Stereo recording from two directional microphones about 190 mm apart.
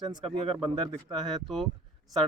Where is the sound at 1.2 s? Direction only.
Centre (ahead or behind).